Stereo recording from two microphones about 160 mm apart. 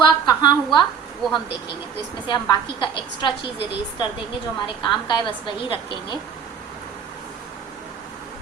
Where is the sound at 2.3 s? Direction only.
25° left (ahead or behind).